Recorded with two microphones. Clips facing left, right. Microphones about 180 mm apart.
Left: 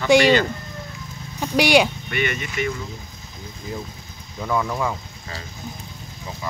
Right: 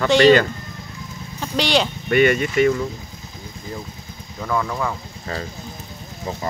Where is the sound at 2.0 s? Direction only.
45° right (ahead or behind).